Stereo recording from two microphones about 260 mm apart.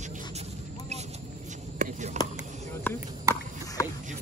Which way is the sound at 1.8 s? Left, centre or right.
Right.